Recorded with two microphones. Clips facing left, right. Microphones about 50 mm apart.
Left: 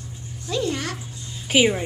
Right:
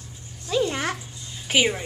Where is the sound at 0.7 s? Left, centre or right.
Right.